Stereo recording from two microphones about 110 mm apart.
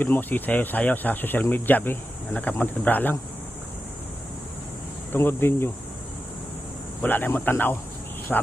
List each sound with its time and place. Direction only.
0.0 s speech: 15° left (ahead or behind)
5.1 s speech: 20° left (ahead or behind)
7.0 s speech: 15° left (ahead or behind)
8.3 s speech: 5° left (ahead or behind)